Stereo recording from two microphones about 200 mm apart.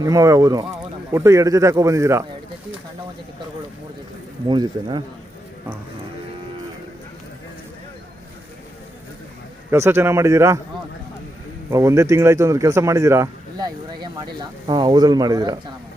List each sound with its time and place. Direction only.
0.0 s speech: 15° right (ahead or behind)
4.4 s speech: 20° right (ahead or behind)
9.6 s speech: 10° right (ahead or behind)
11.7 s speech: 15° right (ahead or behind)